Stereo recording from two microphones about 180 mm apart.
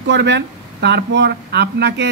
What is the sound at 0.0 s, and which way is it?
Speech, 75° right (ahead or behind).